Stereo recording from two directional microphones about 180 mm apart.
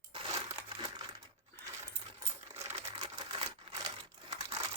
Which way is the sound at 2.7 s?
30° right (ahead or behind).